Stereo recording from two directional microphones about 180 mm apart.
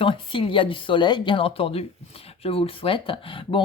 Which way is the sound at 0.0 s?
30° left (ahead or behind).